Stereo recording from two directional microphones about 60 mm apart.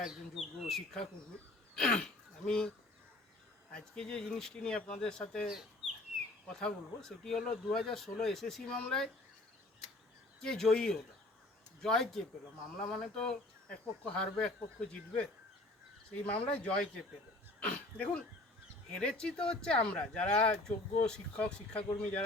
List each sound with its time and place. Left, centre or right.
0.0 s speech: centre
1.7 s speech: centre
5.5 s chicken: centre
6.6 s speech: centre
10.4 s speech: centre